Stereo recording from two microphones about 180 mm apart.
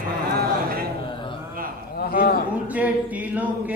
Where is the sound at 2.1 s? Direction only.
55° left (ahead or behind).